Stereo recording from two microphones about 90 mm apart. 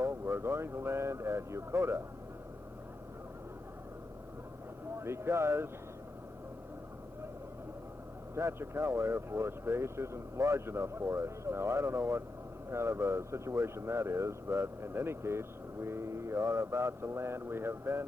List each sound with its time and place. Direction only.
0.0 s speech: 25° right (ahead or behind)
4.9 s speech: 30° right (ahead or behind)
8.4 s speech: 30° right (ahead or behind)